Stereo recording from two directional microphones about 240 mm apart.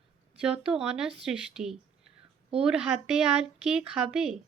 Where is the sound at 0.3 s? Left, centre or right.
Centre.